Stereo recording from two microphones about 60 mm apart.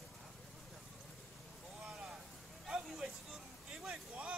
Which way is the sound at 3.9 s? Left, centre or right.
Right.